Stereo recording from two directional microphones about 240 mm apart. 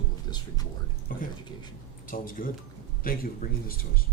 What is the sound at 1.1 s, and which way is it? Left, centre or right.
Speech, left.